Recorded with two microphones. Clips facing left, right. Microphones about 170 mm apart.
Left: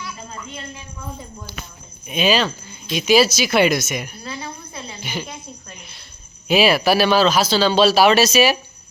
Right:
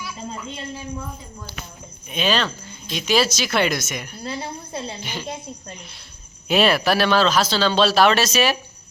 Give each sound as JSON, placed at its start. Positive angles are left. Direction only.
{"t": 0.3, "sound": "speech", "side_deg": -25}
{"t": 2.0, "sound": "speech", "side_deg": 10}
{"t": 4.2, "sound": "a woman's voice", "side_deg": -30}
{"t": 6.5, "sound": "speech", "side_deg": 5}